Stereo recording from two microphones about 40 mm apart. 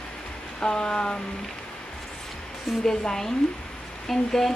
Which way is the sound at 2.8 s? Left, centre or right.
Centre.